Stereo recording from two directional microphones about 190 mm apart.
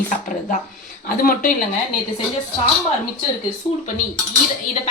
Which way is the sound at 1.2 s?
50° left (ahead or behind).